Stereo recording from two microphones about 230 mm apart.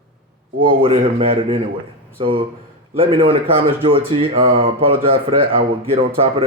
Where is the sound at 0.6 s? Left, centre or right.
Right.